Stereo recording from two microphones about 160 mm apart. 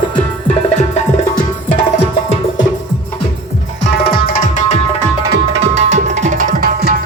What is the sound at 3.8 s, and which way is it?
Tabla, 80° left.